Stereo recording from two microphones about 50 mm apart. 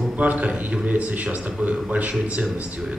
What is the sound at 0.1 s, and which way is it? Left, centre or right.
A man's voice, right.